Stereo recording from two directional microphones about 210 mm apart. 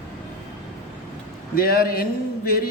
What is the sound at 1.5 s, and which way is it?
Speech, 45° left (ahead or behind).